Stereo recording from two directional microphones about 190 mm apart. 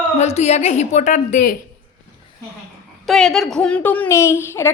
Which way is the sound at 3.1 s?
Centre (ahead or behind).